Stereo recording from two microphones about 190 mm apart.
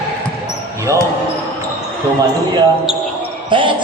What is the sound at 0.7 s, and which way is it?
Basketball bounce, 15° right (ahead or behind).